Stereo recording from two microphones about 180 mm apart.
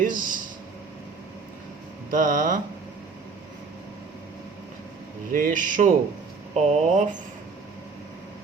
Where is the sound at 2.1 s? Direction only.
45° right (ahead or behind).